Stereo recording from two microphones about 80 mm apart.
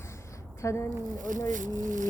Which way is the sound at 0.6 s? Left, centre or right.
Left.